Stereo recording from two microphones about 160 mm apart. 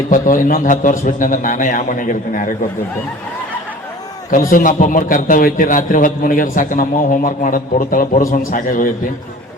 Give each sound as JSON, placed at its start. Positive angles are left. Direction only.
{"t": 0.1, "sound": "a man's voice", "side_deg": 55}
{"t": 4.3, "sound": "a man's voice", "side_deg": 60}